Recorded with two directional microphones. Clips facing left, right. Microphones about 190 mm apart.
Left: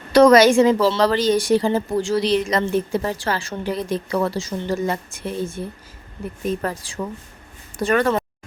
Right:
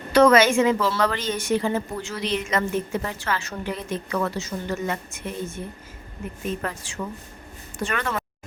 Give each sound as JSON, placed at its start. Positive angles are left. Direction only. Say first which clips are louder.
{"t": 0.1, "sound": "a woman's voice", "louder": "left 4 dB", "side_deg": 35}